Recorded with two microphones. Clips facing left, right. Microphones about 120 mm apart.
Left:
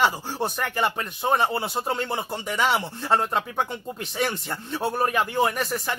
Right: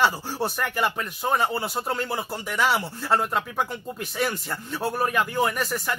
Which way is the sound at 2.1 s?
20° left (ahead or behind).